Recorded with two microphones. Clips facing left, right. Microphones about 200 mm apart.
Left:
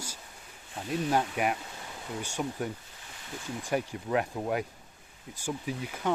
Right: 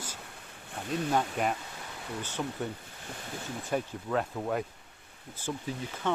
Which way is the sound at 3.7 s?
10° left (ahead or behind).